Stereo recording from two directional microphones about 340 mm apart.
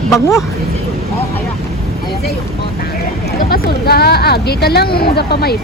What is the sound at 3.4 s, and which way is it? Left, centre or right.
Speech, left.